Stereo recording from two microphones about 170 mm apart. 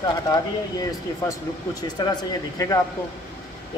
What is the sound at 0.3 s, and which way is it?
Speech, 20° left (ahead or behind).